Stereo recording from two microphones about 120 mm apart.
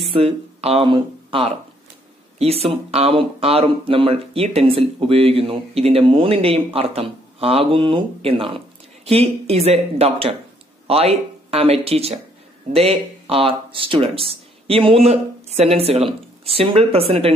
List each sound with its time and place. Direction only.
0.1 s speech: 55° right (ahead or behind)